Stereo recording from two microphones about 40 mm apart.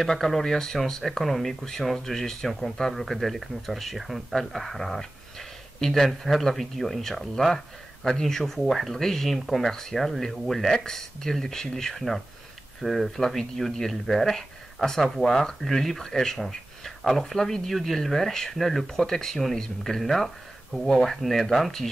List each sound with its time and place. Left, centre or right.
0.0 s speech: centre